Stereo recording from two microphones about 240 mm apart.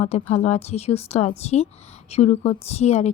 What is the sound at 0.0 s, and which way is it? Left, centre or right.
A woman's voice, left.